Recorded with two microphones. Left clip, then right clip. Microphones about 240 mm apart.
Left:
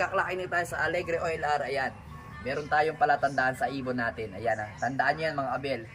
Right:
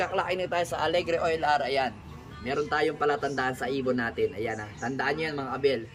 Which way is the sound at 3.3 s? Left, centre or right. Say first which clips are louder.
Left 1 dB; right.